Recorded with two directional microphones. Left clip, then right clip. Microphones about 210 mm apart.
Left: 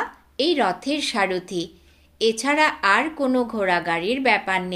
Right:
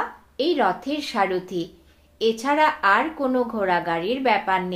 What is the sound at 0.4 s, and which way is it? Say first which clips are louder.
Speech: even; 35° left (ahead or behind).